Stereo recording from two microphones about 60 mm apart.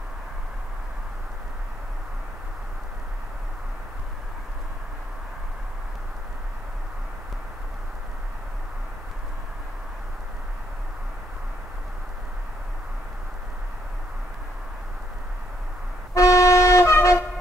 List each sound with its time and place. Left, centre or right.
16.2 s toot: left